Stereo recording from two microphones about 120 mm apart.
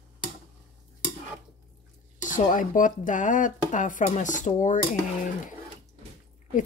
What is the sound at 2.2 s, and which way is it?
A woman's voice, 90° left.